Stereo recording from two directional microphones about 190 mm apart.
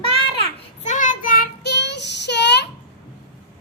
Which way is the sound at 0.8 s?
40° left (ahead or behind).